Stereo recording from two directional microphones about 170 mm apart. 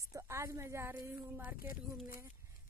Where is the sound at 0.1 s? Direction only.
15° right (ahead or behind).